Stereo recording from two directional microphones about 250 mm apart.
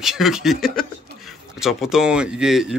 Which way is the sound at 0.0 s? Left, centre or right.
Centre.